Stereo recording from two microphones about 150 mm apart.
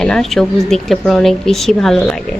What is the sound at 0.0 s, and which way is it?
A woman's voice, 5° left (ahead or behind).